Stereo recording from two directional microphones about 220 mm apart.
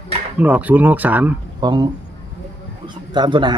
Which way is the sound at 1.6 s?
20° right (ahead or behind).